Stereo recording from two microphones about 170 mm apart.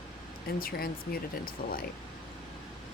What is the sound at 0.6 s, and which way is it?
Speech, 60° left (ahead or behind).